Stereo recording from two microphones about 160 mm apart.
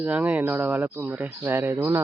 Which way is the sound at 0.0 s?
10° right (ahead or behind).